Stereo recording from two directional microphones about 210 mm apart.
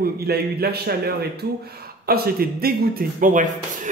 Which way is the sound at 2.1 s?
45° right (ahead or behind).